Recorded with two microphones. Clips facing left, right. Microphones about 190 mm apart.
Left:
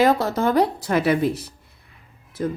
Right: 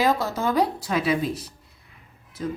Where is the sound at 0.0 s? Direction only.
60° left (ahead or behind).